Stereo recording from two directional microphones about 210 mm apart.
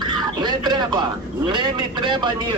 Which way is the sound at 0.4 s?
20° right (ahead or behind).